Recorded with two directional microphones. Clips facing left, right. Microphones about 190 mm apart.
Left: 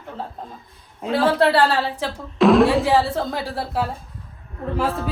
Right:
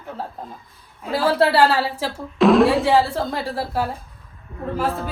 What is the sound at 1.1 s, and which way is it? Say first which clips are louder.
Speech: left 1 dB; centre (ahead or behind).